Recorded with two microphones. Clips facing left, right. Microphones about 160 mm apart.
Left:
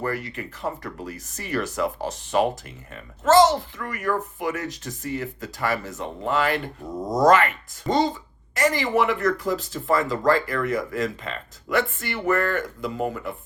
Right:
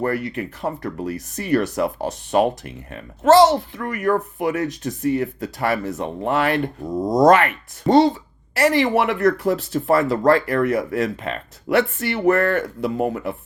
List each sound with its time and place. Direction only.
0.0 s speech: 55° right (ahead or behind)